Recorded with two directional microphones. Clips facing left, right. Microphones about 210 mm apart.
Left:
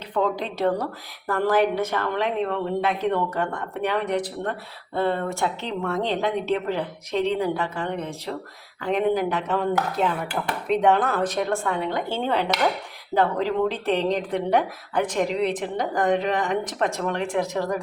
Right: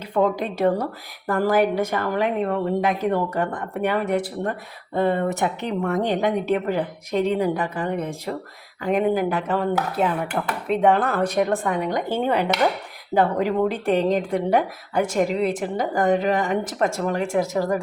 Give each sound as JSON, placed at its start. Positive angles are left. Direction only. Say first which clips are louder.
{"t": 0.1, "sound": "a woman's voice", "louder": "right 3 dB", "side_deg": -10}